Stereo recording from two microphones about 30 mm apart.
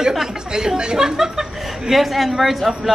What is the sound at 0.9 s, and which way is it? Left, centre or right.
Speech, centre.